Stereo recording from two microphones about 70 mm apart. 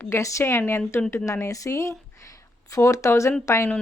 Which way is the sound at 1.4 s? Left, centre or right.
Left.